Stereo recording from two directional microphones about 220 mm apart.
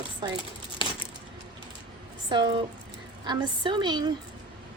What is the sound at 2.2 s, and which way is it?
Speech, 20° right (ahead or behind).